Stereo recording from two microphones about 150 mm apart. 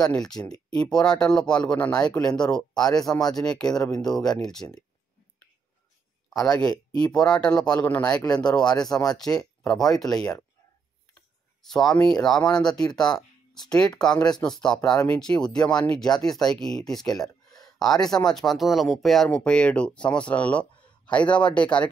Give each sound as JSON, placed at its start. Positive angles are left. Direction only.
{"t": 0.0, "sound": "speech", "side_deg": 5}
{"t": 6.5, "sound": "speech", "side_deg": 25}
{"t": 7.2, "sound": "speech", "side_deg": 5}
{"t": 9.6, "sound": "a sound", "side_deg": 5}
{"t": 9.9, "sound": "speech", "side_deg": 5}
{"t": 11.7, "sound": "speech", "side_deg": 5}